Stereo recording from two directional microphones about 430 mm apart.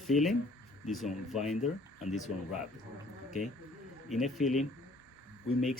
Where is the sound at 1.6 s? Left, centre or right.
Centre.